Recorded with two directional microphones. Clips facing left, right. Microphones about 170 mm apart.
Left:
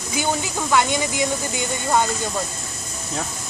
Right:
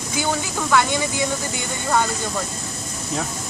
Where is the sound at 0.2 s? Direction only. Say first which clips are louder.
Even; 20° left (ahead or behind).